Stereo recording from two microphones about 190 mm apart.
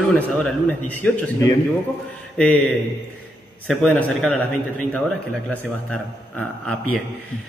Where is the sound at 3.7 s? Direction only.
5° left (ahead or behind).